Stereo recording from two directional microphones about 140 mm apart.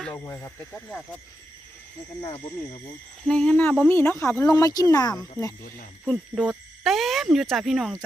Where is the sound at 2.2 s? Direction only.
40° left (ahead or behind).